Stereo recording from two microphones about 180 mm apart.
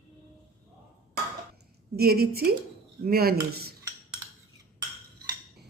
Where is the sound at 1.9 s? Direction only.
60° right (ahead or behind).